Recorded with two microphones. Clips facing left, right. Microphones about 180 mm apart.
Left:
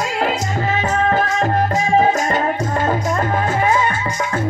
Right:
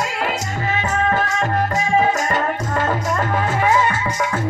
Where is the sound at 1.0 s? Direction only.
40° left (ahead or behind).